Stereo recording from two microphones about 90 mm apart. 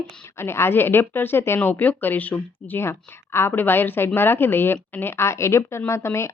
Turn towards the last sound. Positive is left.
turn(degrees=30)  # may be behind; listen again after turning